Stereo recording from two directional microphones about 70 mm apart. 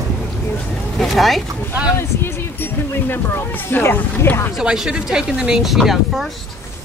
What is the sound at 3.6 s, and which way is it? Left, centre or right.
Speech, left.